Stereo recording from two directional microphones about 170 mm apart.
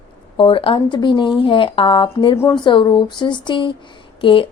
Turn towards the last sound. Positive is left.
turn(degrees=30)  # may be behind; listen again after turning